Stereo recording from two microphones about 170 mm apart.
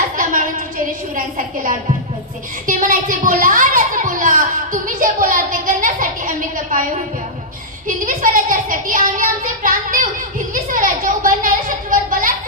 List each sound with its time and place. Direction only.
2.6 s children playing: 50° right (ahead or behind)
7.9 s a child's voice: 50° right (ahead or behind)